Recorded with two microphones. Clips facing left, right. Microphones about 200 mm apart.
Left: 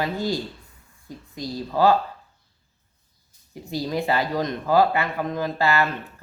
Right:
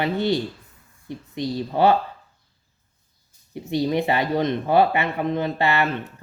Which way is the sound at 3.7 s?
25° right (ahead or behind).